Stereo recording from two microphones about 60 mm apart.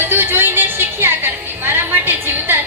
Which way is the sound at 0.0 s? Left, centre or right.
Right.